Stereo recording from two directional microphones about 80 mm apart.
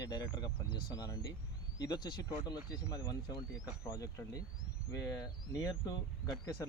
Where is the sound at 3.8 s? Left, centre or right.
Left.